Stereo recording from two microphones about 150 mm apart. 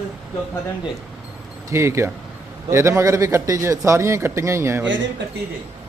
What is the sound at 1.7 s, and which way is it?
A man's voice, 20° right (ahead or behind).